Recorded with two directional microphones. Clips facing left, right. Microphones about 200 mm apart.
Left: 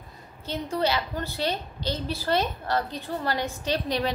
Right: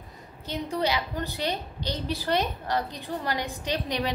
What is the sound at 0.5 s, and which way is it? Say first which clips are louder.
A woman's voice: left 1 dB; 15° right (ahead or behind).